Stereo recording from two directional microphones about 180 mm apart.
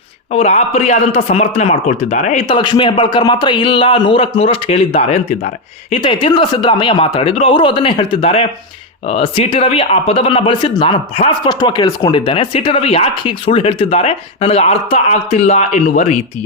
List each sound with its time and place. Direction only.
0.3 s speech: 35° left (ahead or behind)